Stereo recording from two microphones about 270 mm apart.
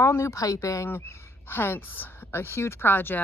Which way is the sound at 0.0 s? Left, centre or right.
Centre.